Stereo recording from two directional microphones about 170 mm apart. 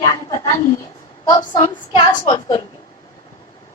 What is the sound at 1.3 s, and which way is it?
A woman's voice, 25° left (ahead or behind).